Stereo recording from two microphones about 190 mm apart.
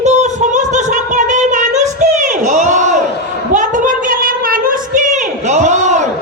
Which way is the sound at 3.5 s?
40° right (ahead or behind).